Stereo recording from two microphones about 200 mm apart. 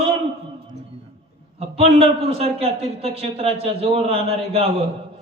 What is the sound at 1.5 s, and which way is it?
A man's voice, 30° right (ahead or behind).